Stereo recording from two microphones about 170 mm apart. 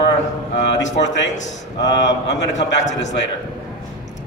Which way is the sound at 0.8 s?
90° left.